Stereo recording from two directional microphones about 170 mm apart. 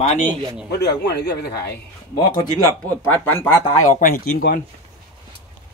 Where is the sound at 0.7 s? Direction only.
75° left (ahead or behind).